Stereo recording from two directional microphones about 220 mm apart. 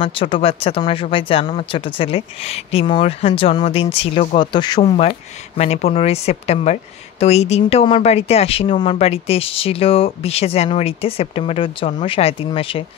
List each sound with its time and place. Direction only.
0.0 s speech: 25° left (ahead or behind)